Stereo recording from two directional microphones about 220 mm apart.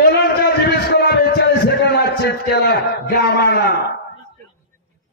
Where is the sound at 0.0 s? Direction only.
45° left (ahead or behind).